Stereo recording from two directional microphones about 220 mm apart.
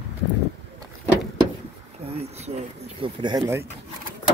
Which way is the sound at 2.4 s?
25° right (ahead or behind).